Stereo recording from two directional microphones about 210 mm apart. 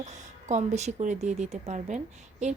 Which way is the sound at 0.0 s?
35° right (ahead or behind).